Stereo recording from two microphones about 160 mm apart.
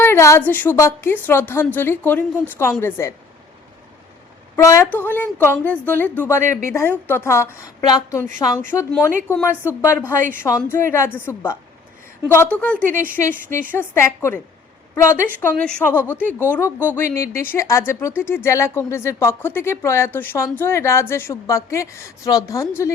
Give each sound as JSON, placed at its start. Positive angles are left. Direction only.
{"t": 0.0, "sound": "speech", "side_deg": 15}
{"t": 4.5, "sound": "speech", "side_deg": 15}